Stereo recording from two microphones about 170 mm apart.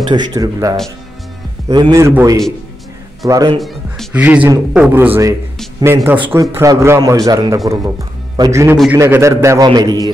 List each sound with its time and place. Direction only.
0.1 s a man's voice: 20° right (ahead or behind)
3.5 s a man's voice: centre (ahead or behind); by 10.1 s 25° right (ahead or behind)